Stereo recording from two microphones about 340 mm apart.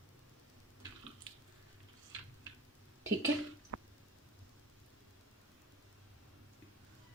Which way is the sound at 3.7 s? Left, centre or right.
Right.